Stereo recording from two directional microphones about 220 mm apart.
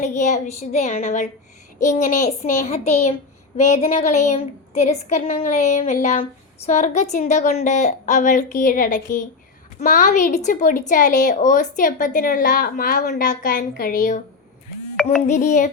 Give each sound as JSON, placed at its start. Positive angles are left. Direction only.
{"t": 0.0, "sound": "a woman's voice", "side_deg": 30}
{"t": 15.3, "sound": "a woman's voice", "side_deg": 35}